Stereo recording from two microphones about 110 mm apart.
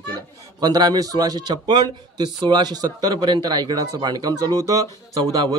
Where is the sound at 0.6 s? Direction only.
35° right (ahead or behind).